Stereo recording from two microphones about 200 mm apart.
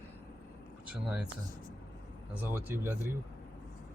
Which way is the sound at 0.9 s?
5° right (ahead or behind).